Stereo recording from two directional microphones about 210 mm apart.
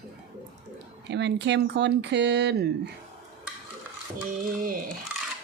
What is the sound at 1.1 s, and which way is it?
Speech, 55° right (ahead or behind).